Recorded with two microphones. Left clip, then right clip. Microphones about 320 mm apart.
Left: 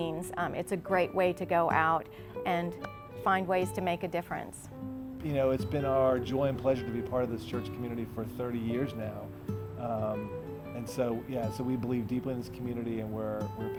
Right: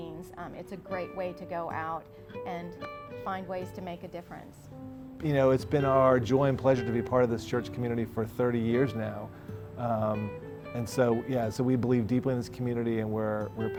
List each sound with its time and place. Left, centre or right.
0.0 s speech: left
5.2 s speech: right